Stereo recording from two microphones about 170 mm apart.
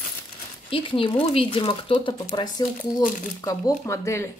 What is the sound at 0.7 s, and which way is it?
Speech, 30° left (ahead or behind).